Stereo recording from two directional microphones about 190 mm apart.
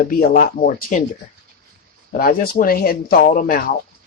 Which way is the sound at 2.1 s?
50° left (ahead or behind).